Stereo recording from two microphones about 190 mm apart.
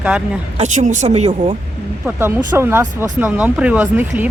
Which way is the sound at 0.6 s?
40° right (ahead or behind).